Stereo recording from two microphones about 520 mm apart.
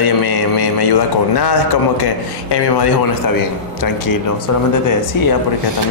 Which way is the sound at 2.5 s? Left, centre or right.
Left.